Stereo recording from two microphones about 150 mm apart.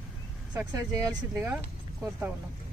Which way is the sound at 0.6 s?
20° right (ahead or behind).